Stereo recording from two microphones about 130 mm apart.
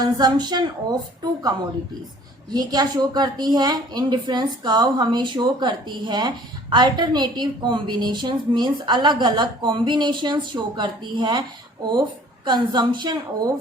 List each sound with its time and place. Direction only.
0.0 s a woman's voice: 30° right (ahead or behind)
12.5 s a woman's voice: 35° right (ahead or behind)